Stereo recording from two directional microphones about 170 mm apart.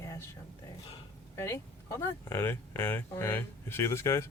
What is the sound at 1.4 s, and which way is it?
Speech, 15° left (ahead or behind).